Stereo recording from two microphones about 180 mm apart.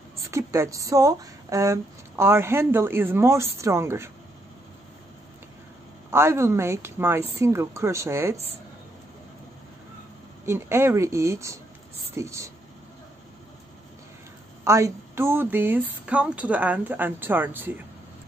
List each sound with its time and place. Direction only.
0.3 s speech: 15° right (ahead or behind)
6.0 s speech: 15° right (ahead or behind)
10.4 s speech: 15° right (ahead or behind)
14.6 s speech: 15° right (ahead or behind)